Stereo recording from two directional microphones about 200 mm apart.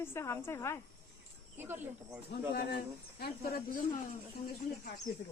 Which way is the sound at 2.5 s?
55° left (ahead or behind).